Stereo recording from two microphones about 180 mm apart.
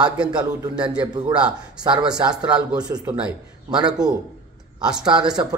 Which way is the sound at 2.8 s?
20° right (ahead or behind).